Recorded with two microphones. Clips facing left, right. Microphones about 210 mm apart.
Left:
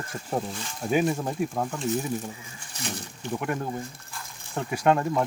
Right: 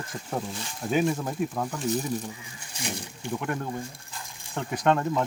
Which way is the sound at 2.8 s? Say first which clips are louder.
Even; 10° right (ahead or behind).